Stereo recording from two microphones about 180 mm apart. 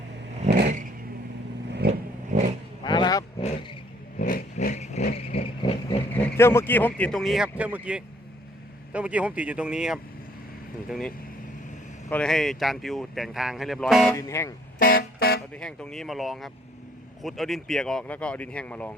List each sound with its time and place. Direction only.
1.9 s vehicle: 40° right (ahead or behind)
2.8 s vehicle: 25° left (ahead or behind)
4.2 s vehicle: 50° left (ahead or behind)
4.7 s vehicle: 40° left (ahead or behind)
6.1 s speech: 15° left (ahead or behind)
14.1 s speech: 15° left (ahead or behind)
14.8 s a sound: 55° left (ahead or behind)
15.5 s speech: 5° left (ahead or behind)